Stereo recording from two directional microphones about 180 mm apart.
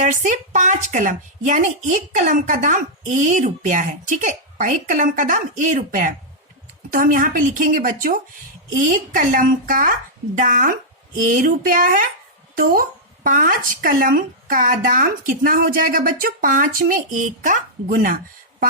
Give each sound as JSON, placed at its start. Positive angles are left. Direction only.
{"t": 0.0, "sound": "speech", "side_deg": -45}